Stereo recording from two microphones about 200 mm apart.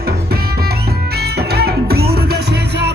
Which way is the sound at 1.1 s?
55° right (ahead or behind).